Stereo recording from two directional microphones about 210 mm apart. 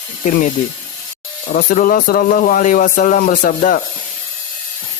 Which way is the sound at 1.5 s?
40° left (ahead or behind).